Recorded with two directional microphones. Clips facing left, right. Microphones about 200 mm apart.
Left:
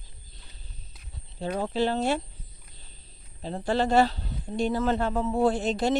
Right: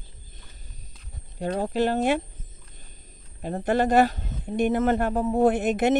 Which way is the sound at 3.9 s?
15° right (ahead or behind).